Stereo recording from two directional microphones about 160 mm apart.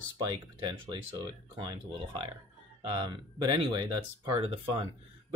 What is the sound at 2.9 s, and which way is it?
Speech, 30° right (ahead or behind).